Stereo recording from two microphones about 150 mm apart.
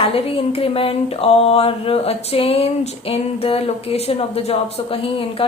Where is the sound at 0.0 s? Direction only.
40° left (ahead or behind).